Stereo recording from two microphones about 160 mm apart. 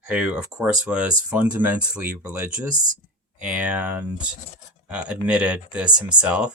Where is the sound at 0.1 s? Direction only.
10° right (ahead or behind).